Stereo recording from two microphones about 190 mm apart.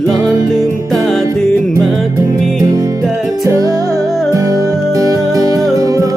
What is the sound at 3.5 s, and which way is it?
Music, 20° right (ahead or behind).